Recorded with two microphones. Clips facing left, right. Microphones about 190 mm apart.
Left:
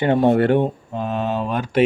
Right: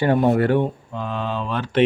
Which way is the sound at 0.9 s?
45° left (ahead or behind).